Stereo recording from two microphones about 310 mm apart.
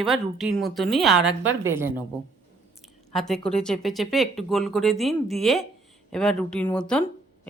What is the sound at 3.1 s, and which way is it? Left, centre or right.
Speech, centre.